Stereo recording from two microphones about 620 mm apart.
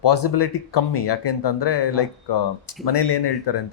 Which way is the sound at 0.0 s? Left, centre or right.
Left.